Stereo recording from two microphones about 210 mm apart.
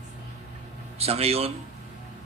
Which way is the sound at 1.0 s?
30° right (ahead or behind).